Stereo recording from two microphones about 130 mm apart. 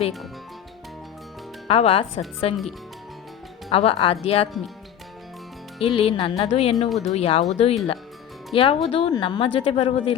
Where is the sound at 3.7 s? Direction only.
45° left (ahead or behind).